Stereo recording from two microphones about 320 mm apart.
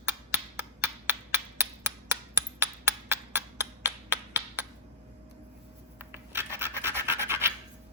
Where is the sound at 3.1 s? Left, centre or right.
Centre.